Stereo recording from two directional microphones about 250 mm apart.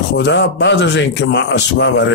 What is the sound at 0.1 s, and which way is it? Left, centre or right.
Speech, left.